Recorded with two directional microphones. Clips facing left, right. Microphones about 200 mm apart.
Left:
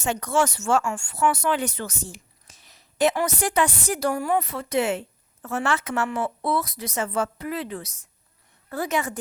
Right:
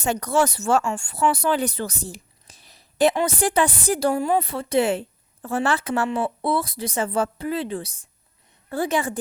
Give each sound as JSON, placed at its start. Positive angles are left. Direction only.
{"t": 0.0, "sound": "a woman's voice", "side_deg": -35}